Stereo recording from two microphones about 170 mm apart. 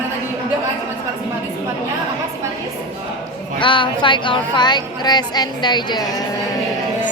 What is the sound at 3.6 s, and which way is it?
Speech, 30° left (ahead or behind).